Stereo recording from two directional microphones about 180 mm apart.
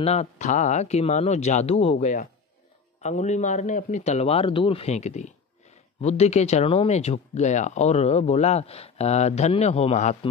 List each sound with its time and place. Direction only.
0.0 s speech: 35° left (ahead or behind)